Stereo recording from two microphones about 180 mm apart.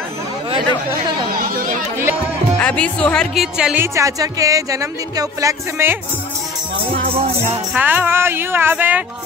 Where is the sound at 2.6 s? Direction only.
5° left (ahead or behind); by 5.9 s 15° right (ahead or behind).